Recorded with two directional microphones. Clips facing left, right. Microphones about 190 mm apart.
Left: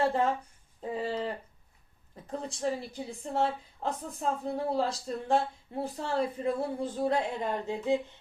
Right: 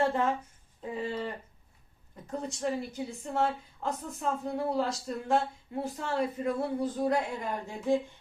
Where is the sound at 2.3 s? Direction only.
30° left (ahead or behind).